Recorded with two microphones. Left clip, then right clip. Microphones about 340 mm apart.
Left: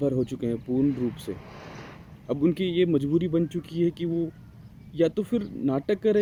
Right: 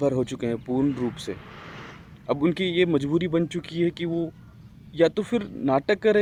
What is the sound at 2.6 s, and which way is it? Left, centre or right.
Speech, right.